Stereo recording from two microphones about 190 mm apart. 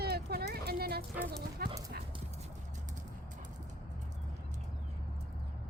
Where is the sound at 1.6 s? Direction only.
55° right (ahead or behind).